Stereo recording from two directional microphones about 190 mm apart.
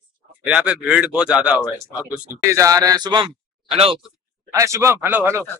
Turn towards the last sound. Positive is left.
turn(degrees=-10)  # may be behind; listen again after turning